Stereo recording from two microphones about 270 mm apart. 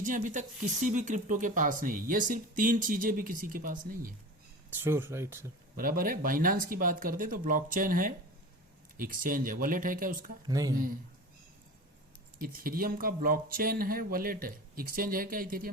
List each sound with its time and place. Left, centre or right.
0.0 s speech: right
4.7 s speech: centre
5.7 s speech: right
10.4 s speech: centre
12.4 s speech: right